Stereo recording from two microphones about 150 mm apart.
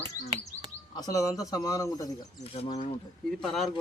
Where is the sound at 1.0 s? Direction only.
25° left (ahead or behind).